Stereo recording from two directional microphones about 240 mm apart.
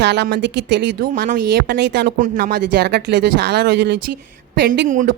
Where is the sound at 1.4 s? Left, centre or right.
Right.